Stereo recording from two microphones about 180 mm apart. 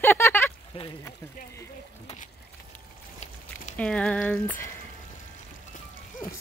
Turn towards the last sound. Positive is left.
turn(degrees=50)  # may be behind; listen again after turning